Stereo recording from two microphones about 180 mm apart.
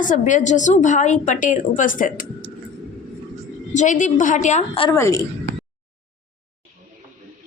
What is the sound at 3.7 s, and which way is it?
A woman's voice, 45° left (ahead or behind).